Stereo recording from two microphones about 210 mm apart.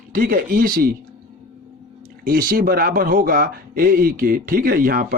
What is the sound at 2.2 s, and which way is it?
A man's voice, 40° right (ahead or behind).